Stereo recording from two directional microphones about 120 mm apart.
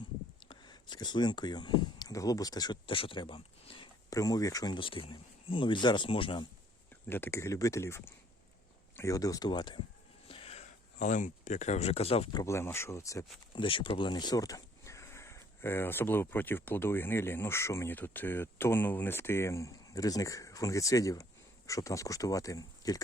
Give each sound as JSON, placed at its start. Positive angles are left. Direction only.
{"t": 0.4, "sound": "speech", "side_deg": 40}
{"t": 2.8, "sound": "speech", "side_deg": 45}
{"t": 4.1, "sound": "speech", "side_deg": 30}
{"t": 7.1, "sound": "speech", "side_deg": 20}
{"t": 10.2, "sound": "a sound", "side_deg": 50}
{"t": 12.3, "sound": "speech", "side_deg": 30}
{"t": 13.6, "sound": "speech", "side_deg": 45}